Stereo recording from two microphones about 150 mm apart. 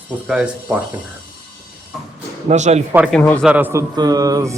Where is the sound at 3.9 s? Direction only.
25° right (ahead or behind).